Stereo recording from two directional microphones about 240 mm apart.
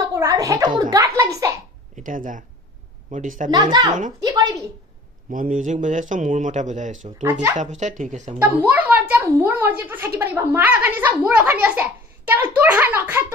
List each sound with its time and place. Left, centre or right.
0.1 s a sound: centre
0.7 s a child's voice: centre
2.0 s speech: right
4.2 s a child's voice: centre
5.3 s speech: right
7.2 s a child's voice: centre
7.5 s speech: right
8.4 s a child's voice: centre